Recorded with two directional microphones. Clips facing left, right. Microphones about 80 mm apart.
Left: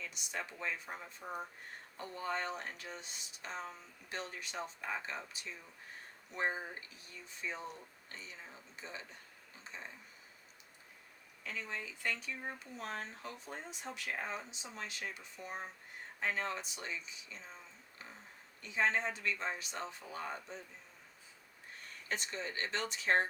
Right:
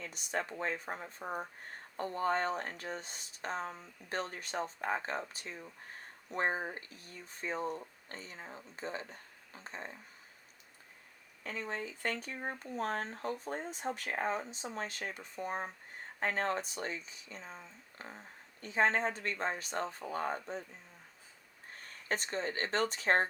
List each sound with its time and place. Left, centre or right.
0.0 s speech: right
11.4 s speech: right
22.1 s speech: right